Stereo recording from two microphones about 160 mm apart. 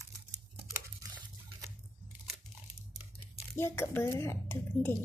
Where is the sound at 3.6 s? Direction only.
15° left (ahead or behind).